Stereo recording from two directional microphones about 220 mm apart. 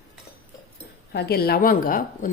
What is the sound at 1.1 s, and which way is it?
Speech, 45° left (ahead or behind).